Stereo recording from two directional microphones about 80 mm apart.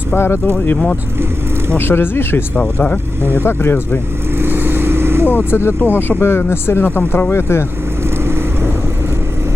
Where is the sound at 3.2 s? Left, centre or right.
Right.